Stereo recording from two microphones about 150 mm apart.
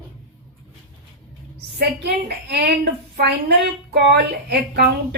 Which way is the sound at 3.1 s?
90° right.